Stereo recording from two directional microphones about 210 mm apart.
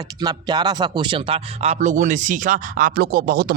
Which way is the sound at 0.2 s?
20° right (ahead or behind).